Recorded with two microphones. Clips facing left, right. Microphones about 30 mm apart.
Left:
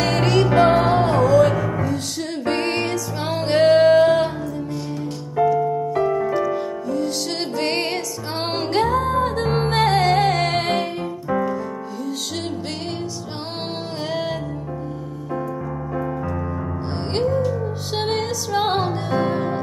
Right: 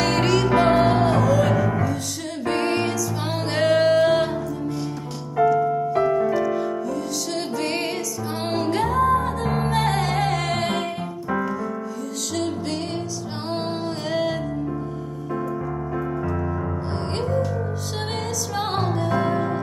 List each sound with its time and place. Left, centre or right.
0.0 s music: centre
1.0 s music: left
2.4 s music: left
3.4 s music: left
5.4 s music: centre
7.0 s music: left
11.2 s music: centre
15.9 s music: centre
17.9 s music: left
19.2 s music: left